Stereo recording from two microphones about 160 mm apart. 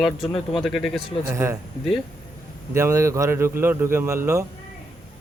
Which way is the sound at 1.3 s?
20° right (ahead or behind).